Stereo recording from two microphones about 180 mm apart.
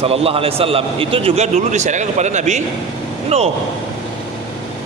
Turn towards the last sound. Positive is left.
turn(degrees=-35)  # may be behind; listen again after turning